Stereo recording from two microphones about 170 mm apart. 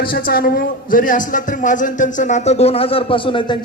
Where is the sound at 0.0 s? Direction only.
55° left (ahead or behind).